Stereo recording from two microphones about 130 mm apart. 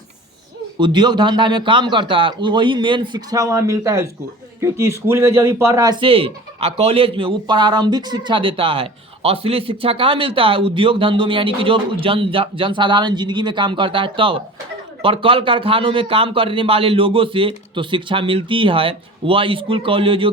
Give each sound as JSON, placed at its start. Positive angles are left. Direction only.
{"t": 0.8, "sound": "a man's voice", "side_deg": -35}
{"t": 6.0, "sound": "speech", "side_deg": -45}